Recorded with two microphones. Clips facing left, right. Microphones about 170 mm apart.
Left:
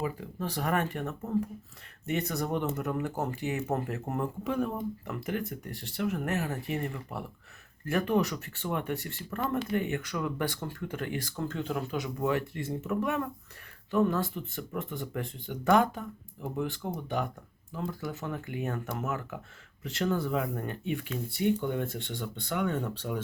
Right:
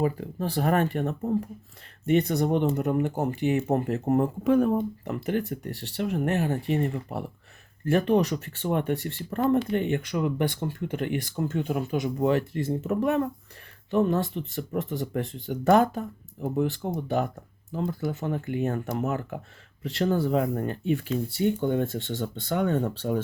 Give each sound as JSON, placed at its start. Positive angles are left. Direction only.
{"t": 0.0, "sound": "speech", "side_deg": -35}
{"t": 4.2, "sound": "speech", "side_deg": -50}
{"t": 5.1, "sound": "speech", "side_deg": -30}
{"t": 12.0, "sound": "speech", "side_deg": -30}